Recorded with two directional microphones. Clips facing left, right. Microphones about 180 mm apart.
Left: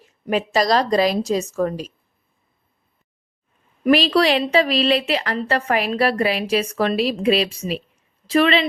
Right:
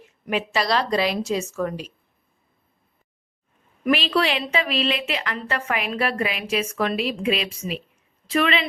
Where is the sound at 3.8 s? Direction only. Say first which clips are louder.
Left 5 dB; 35° left (ahead or behind).